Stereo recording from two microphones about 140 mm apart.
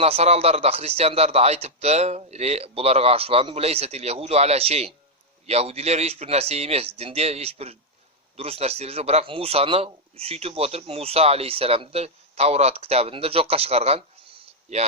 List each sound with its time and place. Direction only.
0.0 s speech: 45° right (ahead or behind)